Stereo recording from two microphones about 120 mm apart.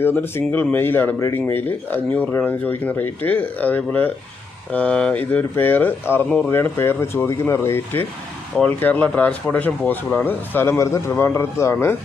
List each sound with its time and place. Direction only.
0.0 s speech: 15° left (ahead or behind)